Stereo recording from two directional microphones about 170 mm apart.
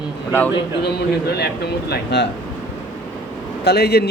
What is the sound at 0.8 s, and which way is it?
A man's voice, 70° left (ahead or behind).